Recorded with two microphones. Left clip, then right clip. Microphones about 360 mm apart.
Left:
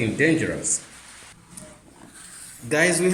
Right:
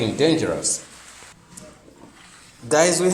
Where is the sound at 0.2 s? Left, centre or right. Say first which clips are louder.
Right 2 dB; right.